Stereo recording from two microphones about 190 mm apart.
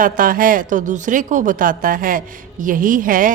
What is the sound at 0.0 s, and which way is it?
Speech, 45° right (ahead or behind).